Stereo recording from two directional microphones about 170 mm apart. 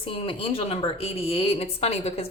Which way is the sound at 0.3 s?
35° left (ahead or behind).